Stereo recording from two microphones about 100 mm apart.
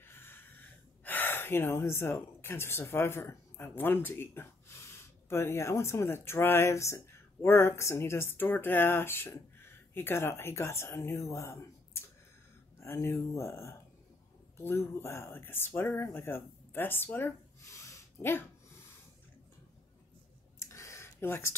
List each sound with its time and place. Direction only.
0.0 s snort: 20° left (ahead or behind)
1.0 s speech: 20° left (ahead or behind)
20.6 s a sound: 30° left (ahead or behind)